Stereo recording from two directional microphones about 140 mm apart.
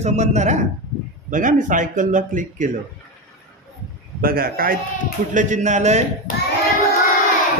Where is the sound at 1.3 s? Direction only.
70° right (ahead or behind).